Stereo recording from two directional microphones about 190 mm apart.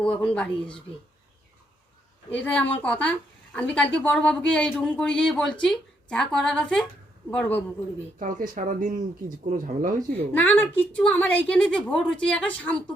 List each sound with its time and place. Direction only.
0.0 s speech: 5° left (ahead or behind)
2.3 s a woman's voice: 10° left (ahead or behind)
8.2 s speech: 40° right (ahead or behind)
10.3 s a woman's voice: 10° left (ahead or behind)